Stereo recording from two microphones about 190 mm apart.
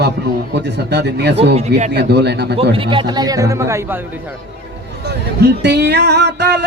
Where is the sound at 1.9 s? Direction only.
60° right (ahead or behind).